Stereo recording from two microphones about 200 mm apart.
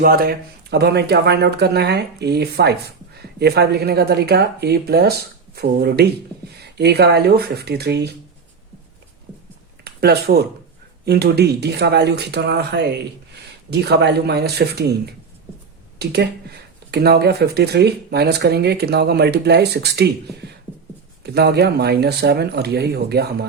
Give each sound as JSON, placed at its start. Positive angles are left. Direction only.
{"t": 0.0, "sound": "speech", "side_deg": -50}
{"t": 9.8, "sound": "speech", "side_deg": -55}
{"t": 21.2, "sound": "speech", "side_deg": -55}